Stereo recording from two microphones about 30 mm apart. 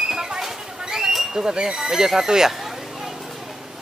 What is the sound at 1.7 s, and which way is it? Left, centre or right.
Speech, centre.